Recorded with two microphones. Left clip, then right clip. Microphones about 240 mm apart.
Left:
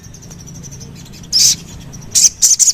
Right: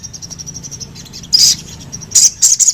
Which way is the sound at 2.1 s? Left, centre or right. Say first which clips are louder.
Right 1 dB; centre.